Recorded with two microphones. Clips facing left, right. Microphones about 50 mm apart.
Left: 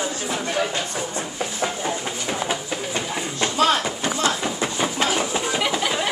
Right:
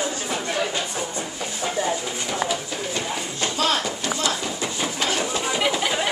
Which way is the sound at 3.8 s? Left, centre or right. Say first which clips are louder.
Left 2 dB; left.